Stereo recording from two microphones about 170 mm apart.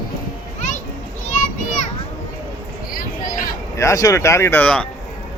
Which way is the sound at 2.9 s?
55° left (ahead or behind).